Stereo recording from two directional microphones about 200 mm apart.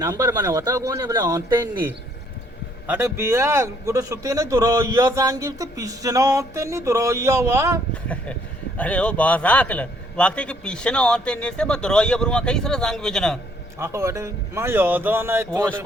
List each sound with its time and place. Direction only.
0.0 s a man's voice: 15° right (ahead or behind)
8.0 s a man's voice: 5° left (ahead or behind)
13.7 s a man's voice: 15° right (ahead or behind)